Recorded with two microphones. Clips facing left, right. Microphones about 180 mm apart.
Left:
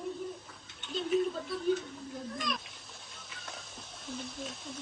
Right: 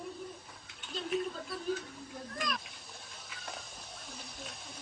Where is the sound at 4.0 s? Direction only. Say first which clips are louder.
Left 10 dB; centre (ahead or behind).